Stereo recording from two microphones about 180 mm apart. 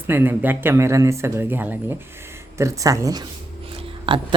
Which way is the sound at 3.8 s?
30° right (ahead or behind).